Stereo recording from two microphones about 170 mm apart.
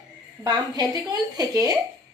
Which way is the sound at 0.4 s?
25° right (ahead or behind).